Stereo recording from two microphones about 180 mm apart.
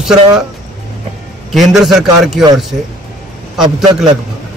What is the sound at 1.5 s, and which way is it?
Speech, centre (ahead or behind).